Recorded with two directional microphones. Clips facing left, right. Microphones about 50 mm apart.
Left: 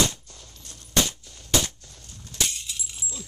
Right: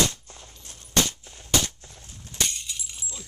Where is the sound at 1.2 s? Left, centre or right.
Right.